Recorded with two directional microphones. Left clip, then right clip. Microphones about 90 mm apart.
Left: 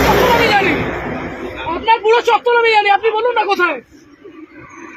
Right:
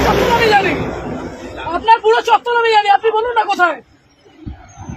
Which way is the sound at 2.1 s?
60° right (ahead or behind).